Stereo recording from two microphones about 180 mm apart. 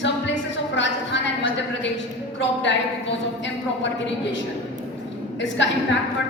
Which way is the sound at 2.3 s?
80° left.